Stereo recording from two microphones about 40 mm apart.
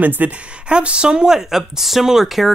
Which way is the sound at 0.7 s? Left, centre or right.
Right.